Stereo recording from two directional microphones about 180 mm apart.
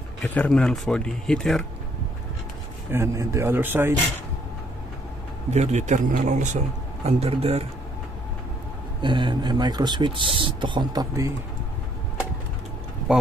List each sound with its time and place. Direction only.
0.2 s speech: 5° left (ahead or behind)
2.9 s a man's voice: 15° right (ahead or behind)
5.5 s a man's voice: 40° right (ahead or behind)
9.0 s speech: 25° right (ahead or behind)